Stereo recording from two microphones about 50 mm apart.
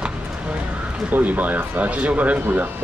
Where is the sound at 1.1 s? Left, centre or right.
Right.